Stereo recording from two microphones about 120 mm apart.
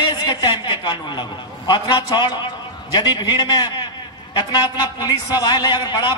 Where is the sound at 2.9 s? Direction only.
35° left (ahead or behind).